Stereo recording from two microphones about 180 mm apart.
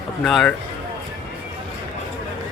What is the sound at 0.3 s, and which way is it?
Speech, centre (ahead or behind).